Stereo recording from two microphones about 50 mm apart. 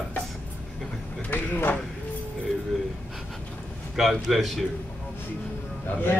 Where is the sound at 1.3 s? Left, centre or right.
Left.